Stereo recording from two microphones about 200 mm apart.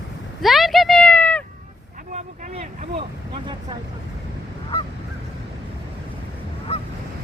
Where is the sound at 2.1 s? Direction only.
35° right (ahead or behind).